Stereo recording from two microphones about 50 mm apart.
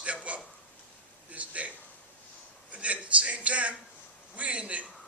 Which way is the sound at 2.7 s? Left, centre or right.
Right.